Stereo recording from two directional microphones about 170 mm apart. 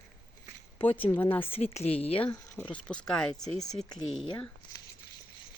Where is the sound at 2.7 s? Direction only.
5° left (ahead or behind).